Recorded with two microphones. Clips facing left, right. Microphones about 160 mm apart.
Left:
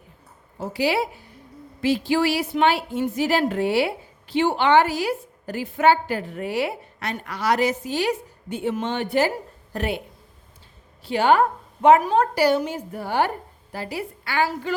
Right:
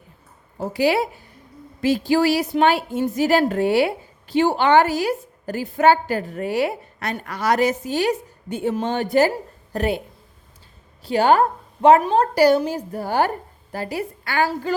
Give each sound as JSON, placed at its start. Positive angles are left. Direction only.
{"t": 0.6, "sound": "a woman's voice", "side_deg": -45}
{"t": 11.0, "sound": "a woman's voice", "side_deg": -40}